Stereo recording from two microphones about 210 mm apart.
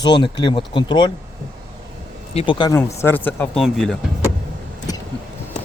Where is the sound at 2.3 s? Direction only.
20° left (ahead or behind).